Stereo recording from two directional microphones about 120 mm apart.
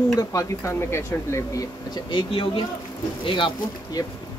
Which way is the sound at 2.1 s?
50° left (ahead or behind).